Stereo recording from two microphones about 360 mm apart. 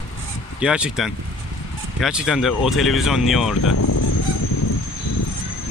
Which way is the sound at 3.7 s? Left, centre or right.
Left.